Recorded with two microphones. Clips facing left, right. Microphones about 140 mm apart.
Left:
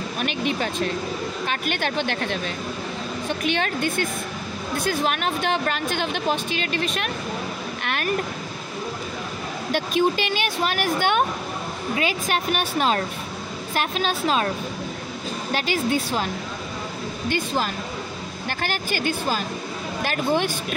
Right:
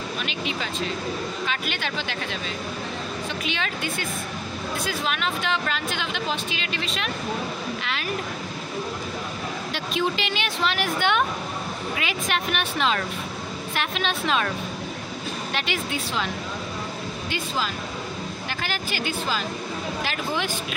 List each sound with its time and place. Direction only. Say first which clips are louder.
0.2 s a woman's voice: left 9 dB; 50° left (ahead or behind)
7.8 s a sound: left 4 dB; 55° left (ahead or behind)
9.7 s a woman's voice: left 6 dB; 50° left (ahead or behind)
15.5 s speech: left 7 dB; 40° left (ahead or behind)
18.6 s a woman's voice: left 4 dB; 50° left (ahead or behind)